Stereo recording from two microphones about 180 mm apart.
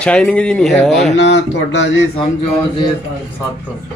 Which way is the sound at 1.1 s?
80° left.